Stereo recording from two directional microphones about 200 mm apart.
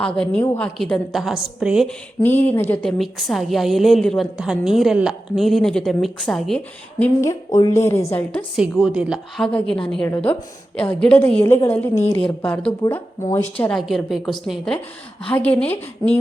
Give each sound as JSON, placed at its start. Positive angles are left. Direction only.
{"t": 0.0, "sound": "a woman's voice", "side_deg": 5}
{"t": 2.2, "sound": "a woman's voice", "side_deg": 10}
{"t": 7.0, "sound": "a woman's voice", "side_deg": 15}
{"t": 8.5, "sound": "a woman's voice", "side_deg": 0}